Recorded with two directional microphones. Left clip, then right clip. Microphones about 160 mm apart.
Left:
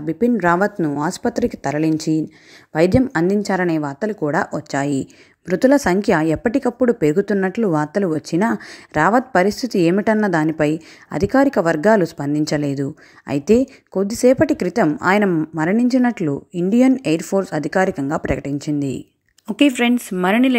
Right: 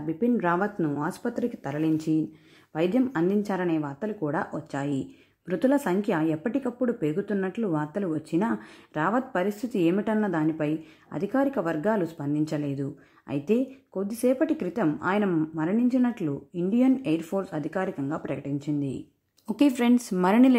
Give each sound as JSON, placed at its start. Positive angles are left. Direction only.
{"t": 0.0, "sound": "a woman's voice", "side_deg": 30}
{"t": 19.4, "sound": "speech", "side_deg": 15}